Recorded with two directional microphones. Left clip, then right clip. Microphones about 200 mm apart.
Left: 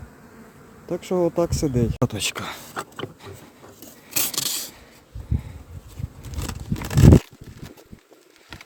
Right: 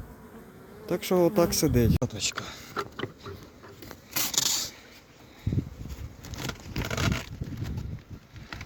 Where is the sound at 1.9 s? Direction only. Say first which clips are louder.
Left 6 dB; 45° left (ahead or behind).